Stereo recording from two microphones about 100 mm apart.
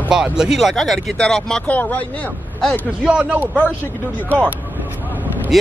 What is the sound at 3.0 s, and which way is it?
Speech, 10° right (ahead or behind).